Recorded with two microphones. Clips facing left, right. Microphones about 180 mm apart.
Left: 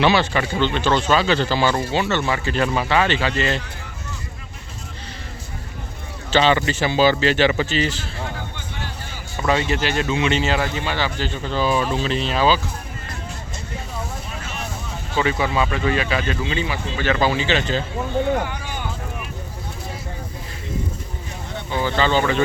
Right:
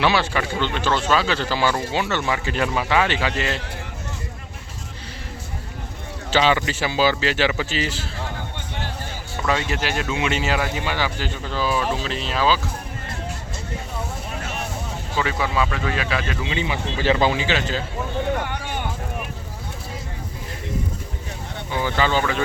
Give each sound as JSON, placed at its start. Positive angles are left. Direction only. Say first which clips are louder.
{"t": 0.0, "sound": "speech", "louder": "left 3 dB", "side_deg": -5}
{"t": 6.3, "sound": "speech", "louder": "left 2 dB", "side_deg": -10}
{"t": 9.5, "sound": "speech", "louder": "left 3 dB", "side_deg": 0}
{"t": 15.2, "sound": "speech", "louder": "left 2 dB", "side_deg": 0}
{"t": 16.5, "sound": "a man's voice", "louder": "left 1 dB", "side_deg": -20}
{"t": 17.4, "sound": "speech", "louder": "left 2 dB", "side_deg": -5}
{"t": 21.7, "sound": "speech", "louder": "left 2 dB", "side_deg": -10}